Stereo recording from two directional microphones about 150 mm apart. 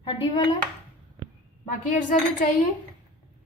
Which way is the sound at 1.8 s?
60° left (ahead or behind).